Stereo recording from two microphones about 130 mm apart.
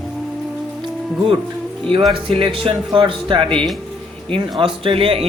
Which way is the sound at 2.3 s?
45° right (ahead or behind).